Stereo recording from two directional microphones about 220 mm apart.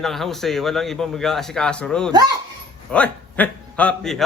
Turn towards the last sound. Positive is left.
turn(degrees=5)  # may be behind; listen again after turning